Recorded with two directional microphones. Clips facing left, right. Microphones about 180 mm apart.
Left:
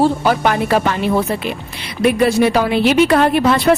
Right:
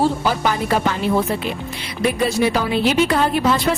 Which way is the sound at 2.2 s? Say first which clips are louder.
Left 4 dB; 65° left (ahead or behind).